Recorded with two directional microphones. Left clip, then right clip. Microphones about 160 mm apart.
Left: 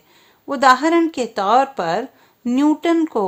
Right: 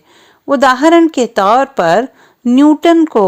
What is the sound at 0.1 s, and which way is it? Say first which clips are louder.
Speech: right 12 dB; 40° right (ahead or behind).